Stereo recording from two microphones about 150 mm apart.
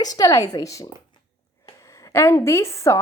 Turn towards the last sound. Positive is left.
turn(degrees=20)  # may be behind; listen again after turning